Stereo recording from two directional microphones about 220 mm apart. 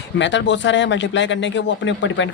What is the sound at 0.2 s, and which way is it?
Speech, 55° left (ahead or behind).